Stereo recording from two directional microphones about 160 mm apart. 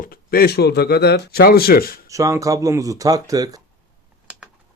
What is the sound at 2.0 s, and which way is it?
Speech, 20° right (ahead or behind).